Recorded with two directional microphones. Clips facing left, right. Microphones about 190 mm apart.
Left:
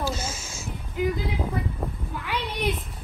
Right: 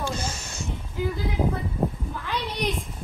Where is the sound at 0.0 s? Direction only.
5° left (ahead or behind).